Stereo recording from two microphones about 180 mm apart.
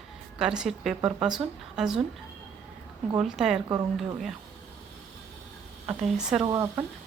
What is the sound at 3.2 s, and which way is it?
Speech, 5° right (ahead or behind).